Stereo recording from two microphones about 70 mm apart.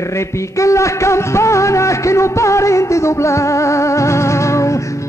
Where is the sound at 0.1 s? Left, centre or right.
Left.